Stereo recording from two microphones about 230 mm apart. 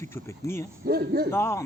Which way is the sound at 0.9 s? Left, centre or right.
Right.